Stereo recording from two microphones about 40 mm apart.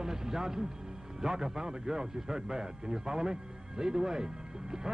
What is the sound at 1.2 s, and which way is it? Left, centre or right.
A man's voice, centre.